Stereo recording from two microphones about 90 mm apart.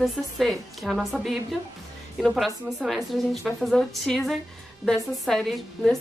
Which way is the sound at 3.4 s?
5° right (ahead or behind).